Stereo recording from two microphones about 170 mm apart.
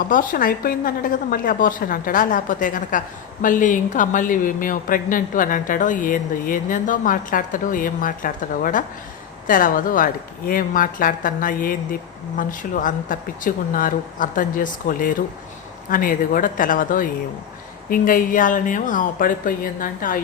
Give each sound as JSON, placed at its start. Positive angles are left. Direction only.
{"t": 0.0, "sound": "speech", "side_deg": 55}